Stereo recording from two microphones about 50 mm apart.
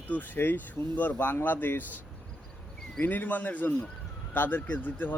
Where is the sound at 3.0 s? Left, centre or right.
Left.